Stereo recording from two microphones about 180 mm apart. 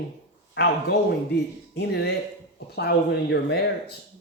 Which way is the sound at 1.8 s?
65° left (ahead or behind).